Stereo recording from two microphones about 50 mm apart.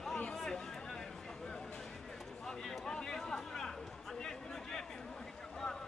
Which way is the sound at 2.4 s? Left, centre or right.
Centre.